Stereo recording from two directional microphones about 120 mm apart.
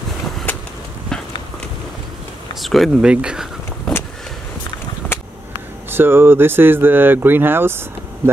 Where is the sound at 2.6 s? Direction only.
Centre (ahead or behind).